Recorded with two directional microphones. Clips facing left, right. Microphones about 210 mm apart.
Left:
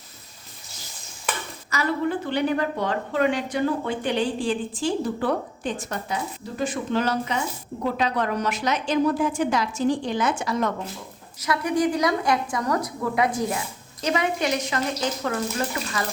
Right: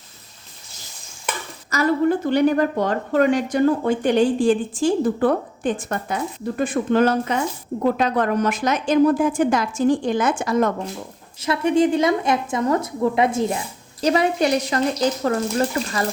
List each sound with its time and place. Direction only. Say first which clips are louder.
1.7 s a woman's voice: right 6 dB; 45° right (ahead or behind)
11.3 s a woman's voice: right 5 dB; 25° right (ahead or behind)